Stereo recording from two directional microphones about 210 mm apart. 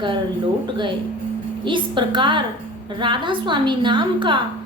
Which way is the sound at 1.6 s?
25° right (ahead or behind).